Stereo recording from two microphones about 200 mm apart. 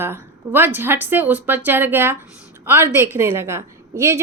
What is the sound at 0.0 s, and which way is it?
A woman's voice, 10° right (ahead or behind).